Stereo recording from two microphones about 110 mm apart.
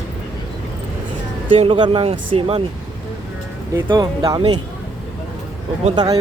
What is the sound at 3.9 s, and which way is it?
Speech, 40° right (ahead or behind).